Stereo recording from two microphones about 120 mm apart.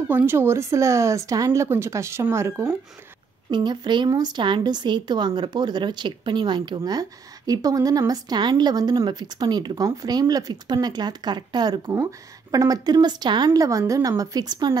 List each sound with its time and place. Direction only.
0.1 s speech: 20° right (ahead or behind)
3.4 s a woman's voice: 40° right (ahead or behind)